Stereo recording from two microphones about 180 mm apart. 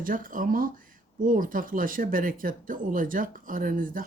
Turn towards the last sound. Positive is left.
turn(degrees=-50)  # may be behind; listen again after turning